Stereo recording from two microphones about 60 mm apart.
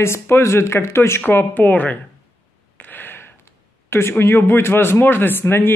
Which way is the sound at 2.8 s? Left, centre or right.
Left.